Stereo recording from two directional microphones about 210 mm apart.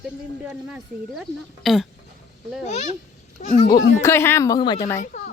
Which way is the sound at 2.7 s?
35° left (ahead or behind).